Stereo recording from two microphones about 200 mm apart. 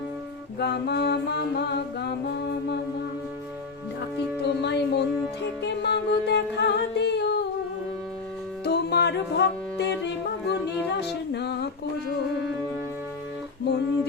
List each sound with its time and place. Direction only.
0.6 s music: 55° left (ahead or behind)
4.4 s music: 55° left (ahead or behind)
8.6 s music: 55° left (ahead or behind)
13.7 s a sound: 60° left (ahead or behind)